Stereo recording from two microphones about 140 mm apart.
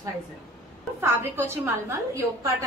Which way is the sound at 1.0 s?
15° right (ahead or behind).